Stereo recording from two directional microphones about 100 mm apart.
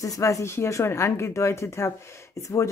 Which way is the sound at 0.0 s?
35° left (ahead or behind).